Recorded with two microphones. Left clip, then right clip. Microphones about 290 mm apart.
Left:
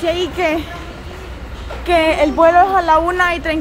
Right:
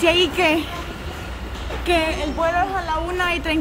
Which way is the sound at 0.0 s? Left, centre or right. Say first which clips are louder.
Even; centre.